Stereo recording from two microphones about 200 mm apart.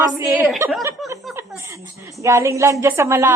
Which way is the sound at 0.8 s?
15° right (ahead or behind).